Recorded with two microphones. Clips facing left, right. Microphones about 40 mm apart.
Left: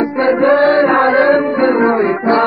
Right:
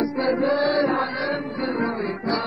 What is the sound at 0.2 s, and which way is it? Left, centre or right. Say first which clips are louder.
Chant: left 11 dB; left.